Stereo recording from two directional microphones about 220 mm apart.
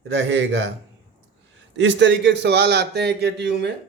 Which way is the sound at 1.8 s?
55° right (ahead or behind).